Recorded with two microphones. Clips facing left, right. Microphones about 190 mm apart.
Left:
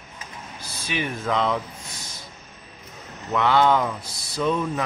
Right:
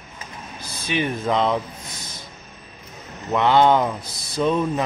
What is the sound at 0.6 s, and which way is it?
Speech, 20° right (ahead or behind).